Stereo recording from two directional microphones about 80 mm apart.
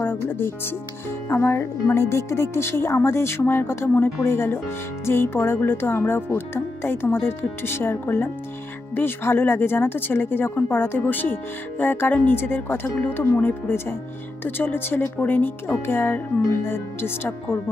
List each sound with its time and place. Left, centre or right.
1.3 s a woman's voice: left